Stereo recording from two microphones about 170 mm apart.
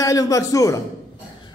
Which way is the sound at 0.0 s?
20° left (ahead or behind).